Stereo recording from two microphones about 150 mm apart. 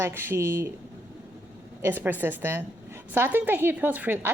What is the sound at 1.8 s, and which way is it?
A woman's voice, 15° right (ahead or behind).